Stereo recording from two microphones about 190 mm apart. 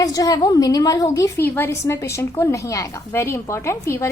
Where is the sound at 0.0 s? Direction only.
20° left (ahead or behind).